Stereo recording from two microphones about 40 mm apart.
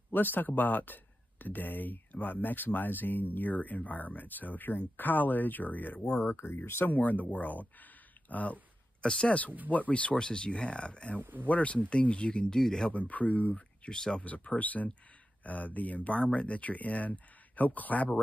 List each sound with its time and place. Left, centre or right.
0.1 s speech: left
5.9 s speech: left
6.2 s speech: left
6.8 s speech: left
9.0 s speech: left
9.7 s speech: left
11.1 s speech: right
11.4 s speech: left
12.5 s speech: centre
12.9 s speech: left
13.6 s speech: centre
14.2 s speech: left